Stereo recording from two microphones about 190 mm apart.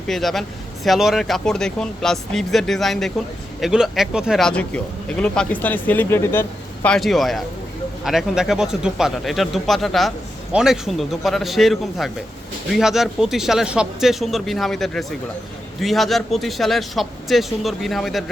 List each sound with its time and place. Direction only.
0.1 s speech: centre (ahead or behind)
6.8 s speech: centre (ahead or behind)